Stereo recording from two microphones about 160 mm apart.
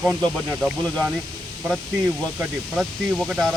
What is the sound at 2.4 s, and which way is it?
Speech, 5° right (ahead or behind).